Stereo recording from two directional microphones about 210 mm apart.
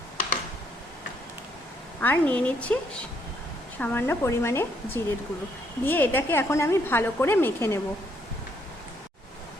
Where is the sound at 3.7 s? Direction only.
10° left (ahead or behind).